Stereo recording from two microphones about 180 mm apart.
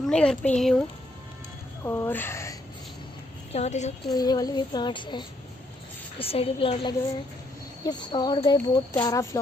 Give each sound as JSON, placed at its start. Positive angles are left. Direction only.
{"t": 0.0, "sound": "speech", "side_deg": 5}
{"t": 1.8, "sound": "speech", "side_deg": 15}
{"t": 3.5, "sound": "a woman's voice", "side_deg": 40}
{"t": 4.1, "sound": "a woman's voice", "side_deg": 20}